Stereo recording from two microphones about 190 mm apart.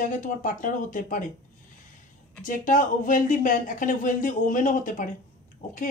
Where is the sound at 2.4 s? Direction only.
45° left (ahead or behind).